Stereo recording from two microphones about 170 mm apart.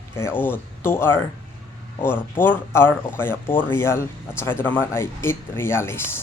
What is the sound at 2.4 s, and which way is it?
Speech, 15° left (ahead or behind).